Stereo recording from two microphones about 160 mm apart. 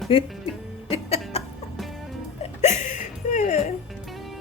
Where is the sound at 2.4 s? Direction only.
45° left (ahead or behind).